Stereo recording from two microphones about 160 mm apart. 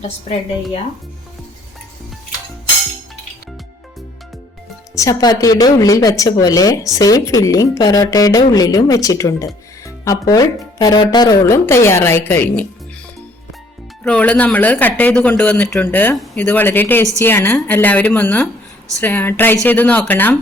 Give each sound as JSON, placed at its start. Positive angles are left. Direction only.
{"t": 4.9, "sound": "speech", "side_deg": 25}
{"t": 14.0, "sound": "speech", "side_deg": 5}